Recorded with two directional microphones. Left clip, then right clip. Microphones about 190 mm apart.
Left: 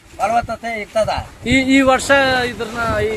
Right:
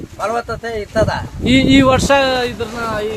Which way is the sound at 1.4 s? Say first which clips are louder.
Right 2 dB; 40° right (ahead or behind).